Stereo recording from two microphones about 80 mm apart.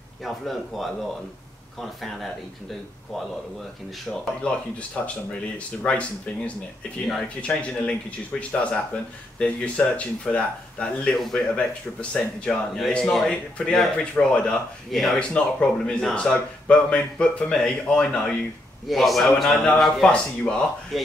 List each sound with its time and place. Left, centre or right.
0.2 s a man's voice: centre
4.4 s speech: centre
15.1 s a man's voice: centre
20.9 s a man's voice: centre